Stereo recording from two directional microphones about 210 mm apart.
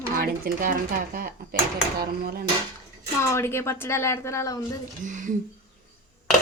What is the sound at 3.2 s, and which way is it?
Speech, 15° left (ahead or behind).